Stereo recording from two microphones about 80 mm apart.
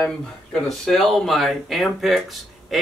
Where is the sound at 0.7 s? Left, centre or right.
Centre.